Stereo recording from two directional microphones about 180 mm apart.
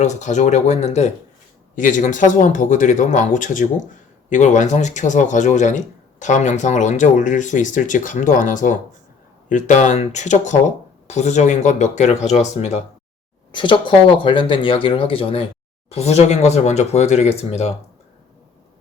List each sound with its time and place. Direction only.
0.0 s speech: 40° left (ahead or behind)
13.5 s speech: 25° left (ahead or behind)